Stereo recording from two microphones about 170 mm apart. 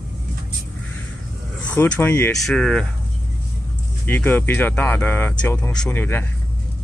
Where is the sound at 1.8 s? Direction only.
10° left (ahead or behind).